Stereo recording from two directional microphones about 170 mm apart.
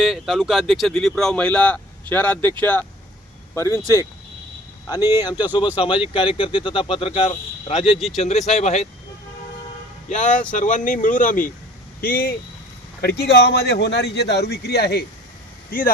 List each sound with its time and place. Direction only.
0.0 s speech: centre (ahead or behind); by 3.8 s 15° left (ahead or behind)
5.2 s speech: 25° left (ahead or behind); by 8.9 s 40° left (ahead or behind)
10.1 s speech: 45° left (ahead or behind)
13.0 s speech: 70° left (ahead or behind)